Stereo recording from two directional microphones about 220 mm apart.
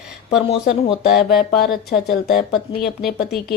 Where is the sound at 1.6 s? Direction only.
45° left (ahead or behind).